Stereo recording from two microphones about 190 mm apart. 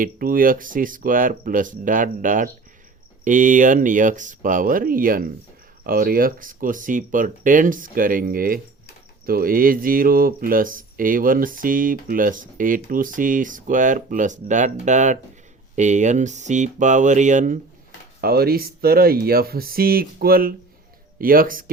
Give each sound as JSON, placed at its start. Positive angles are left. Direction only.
{"t": 0.0, "sound": "speech", "side_deg": -50}
{"t": 18.2, "sound": "speech", "side_deg": -55}